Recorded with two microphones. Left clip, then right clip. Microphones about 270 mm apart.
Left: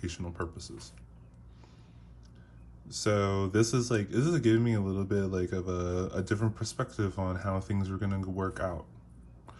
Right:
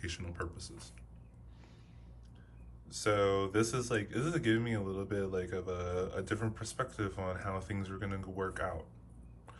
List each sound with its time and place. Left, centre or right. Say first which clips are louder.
0.0 s speech: left 4 dB; centre
2.8 s speech: left 1 dB; left